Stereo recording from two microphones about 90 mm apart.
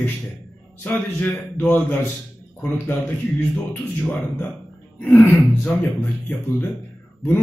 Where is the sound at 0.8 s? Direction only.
20° left (ahead or behind).